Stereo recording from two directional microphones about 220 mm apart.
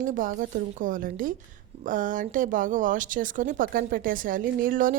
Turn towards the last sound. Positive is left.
turn(degrees=-40)  # may be behind; listen again after turning